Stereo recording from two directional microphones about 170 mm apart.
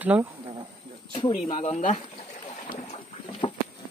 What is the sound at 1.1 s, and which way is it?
Speech, 30° left (ahead or behind).